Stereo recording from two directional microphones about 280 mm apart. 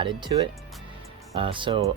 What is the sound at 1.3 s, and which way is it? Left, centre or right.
Speech, centre.